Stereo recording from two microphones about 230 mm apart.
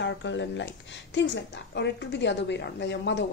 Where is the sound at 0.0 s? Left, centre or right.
Left.